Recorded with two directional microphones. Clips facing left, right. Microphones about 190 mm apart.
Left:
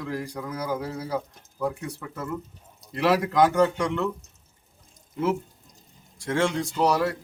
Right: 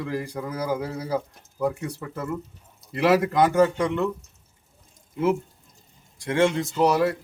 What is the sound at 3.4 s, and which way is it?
Speech, 5° right (ahead or behind).